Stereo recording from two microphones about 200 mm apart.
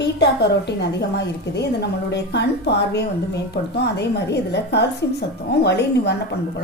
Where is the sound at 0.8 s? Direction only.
55° left (ahead or behind).